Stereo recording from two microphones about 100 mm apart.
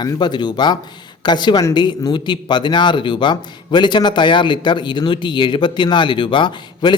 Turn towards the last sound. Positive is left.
turn(degrees=50)  # may be behind; listen again after turning